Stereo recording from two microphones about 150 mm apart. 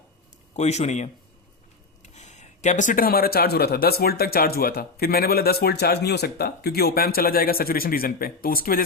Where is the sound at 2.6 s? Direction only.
55° left (ahead or behind).